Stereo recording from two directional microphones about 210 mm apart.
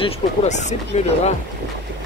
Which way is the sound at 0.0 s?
35° left (ahead or behind).